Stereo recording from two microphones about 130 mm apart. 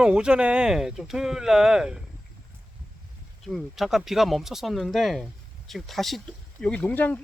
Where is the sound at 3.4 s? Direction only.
Centre (ahead or behind).